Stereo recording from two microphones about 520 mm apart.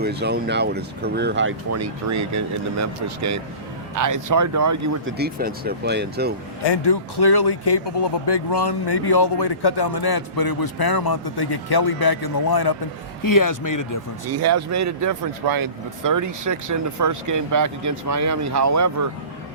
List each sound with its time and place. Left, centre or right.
0.0 s speech: centre
5.1 s speech: centre
6.7 s speech: left
14.3 s speech: right